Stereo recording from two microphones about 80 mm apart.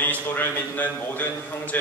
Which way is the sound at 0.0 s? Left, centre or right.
Left.